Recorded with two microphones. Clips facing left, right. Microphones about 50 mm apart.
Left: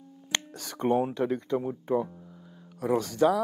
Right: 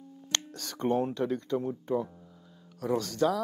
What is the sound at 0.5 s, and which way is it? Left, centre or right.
Speech, centre.